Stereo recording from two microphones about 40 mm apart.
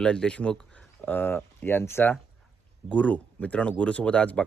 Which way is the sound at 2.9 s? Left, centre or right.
Left.